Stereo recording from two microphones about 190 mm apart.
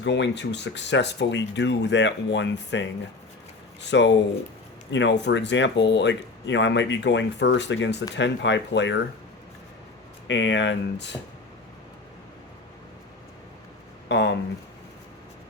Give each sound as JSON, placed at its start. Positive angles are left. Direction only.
{"t": 0.0, "sound": "speech", "side_deg": 70}
{"t": 10.2, "sound": "speech", "side_deg": 75}
{"t": 14.1, "sound": "a sound", "side_deg": 65}